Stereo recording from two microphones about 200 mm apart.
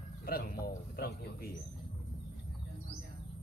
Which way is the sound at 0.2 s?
50° left (ahead or behind).